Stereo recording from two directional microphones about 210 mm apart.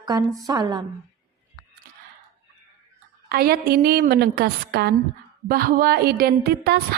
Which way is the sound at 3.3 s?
45° right (ahead or behind).